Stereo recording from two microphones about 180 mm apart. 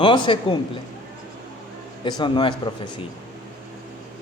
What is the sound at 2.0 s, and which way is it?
Speech, 25° left (ahead or behind).